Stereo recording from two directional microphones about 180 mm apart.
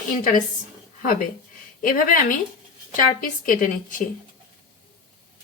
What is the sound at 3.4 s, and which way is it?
Speech, 50° left (ahead or behind).